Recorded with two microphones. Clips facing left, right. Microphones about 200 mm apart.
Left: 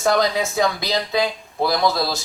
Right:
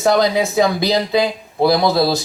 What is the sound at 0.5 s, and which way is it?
Speech, 30° right (ahead or behind).